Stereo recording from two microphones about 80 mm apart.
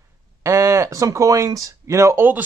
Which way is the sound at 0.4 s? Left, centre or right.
Right.